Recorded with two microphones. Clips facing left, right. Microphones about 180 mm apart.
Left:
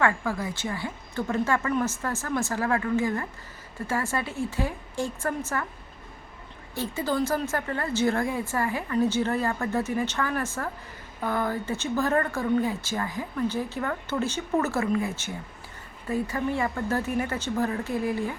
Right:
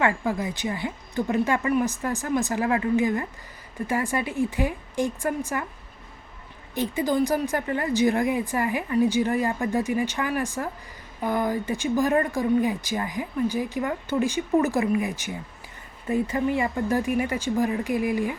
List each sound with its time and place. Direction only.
0.0 s a woman's voice: 20° right (ahead or behind)
6.7 s a woman's voice: 15° right (ahead or behind)